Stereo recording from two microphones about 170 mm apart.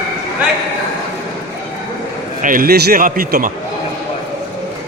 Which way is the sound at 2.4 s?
55° right (ahead or behind).